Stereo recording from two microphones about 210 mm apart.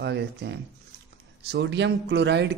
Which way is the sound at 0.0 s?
55° right (ahead or behind).